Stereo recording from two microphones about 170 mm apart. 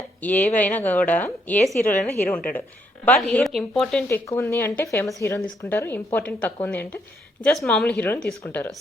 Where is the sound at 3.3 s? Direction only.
Centre (ahead or behind).